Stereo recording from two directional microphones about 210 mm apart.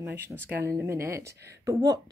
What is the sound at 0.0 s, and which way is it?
Speech, 10° right (ahead or behind).